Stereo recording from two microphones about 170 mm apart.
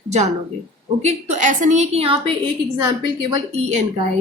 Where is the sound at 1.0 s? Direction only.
45° right (ahead or behind).